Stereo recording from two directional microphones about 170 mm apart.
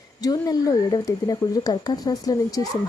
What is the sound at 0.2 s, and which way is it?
A child's voice, 20° left (ahead or behind).